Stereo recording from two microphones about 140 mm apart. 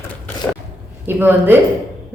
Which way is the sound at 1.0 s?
15° right (ahead or behind).